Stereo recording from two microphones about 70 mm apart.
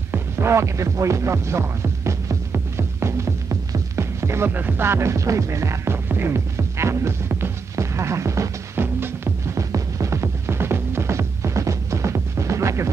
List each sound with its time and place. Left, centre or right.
0.1 s music: right
6.0 s music: right
9.6 s music: right